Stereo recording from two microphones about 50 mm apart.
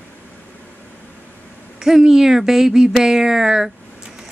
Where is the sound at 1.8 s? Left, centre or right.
Centre.